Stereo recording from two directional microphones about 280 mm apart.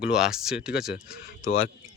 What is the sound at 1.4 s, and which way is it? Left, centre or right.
Speech, left.